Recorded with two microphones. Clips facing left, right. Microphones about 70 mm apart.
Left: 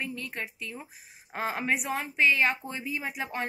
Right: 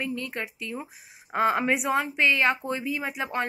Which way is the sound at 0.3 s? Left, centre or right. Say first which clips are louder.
Right 4 dB; right.